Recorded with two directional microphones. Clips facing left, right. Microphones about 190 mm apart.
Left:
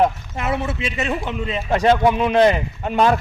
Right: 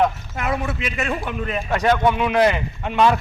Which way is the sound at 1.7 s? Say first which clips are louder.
Left 3 dB; 30° left (ahead or behind).